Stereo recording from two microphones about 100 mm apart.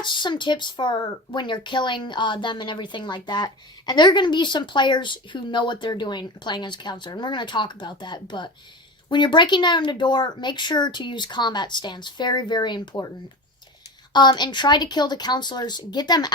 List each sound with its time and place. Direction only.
0.0 s speech: 50° left (ahead or behind)
14.1 s speech: 45° left (ahead or behind)